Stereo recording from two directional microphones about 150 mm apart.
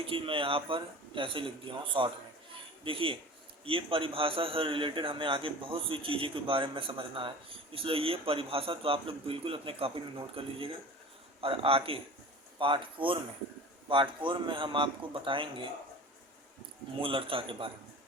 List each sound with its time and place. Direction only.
0.0 s a man's voice: 35° right (ahead or behind)
17.0 s a man's voice: 35° right (ahead or behind)